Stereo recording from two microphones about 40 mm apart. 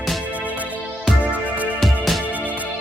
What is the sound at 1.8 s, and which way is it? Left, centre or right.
Music, centre.